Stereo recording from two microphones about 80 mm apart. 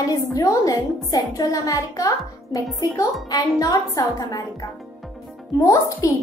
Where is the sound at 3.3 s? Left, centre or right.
Left.